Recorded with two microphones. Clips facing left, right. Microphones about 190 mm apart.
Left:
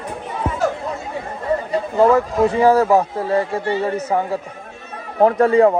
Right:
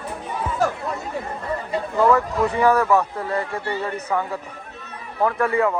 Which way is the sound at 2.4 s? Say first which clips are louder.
Left 4 dB; 35° left (ahead or behind).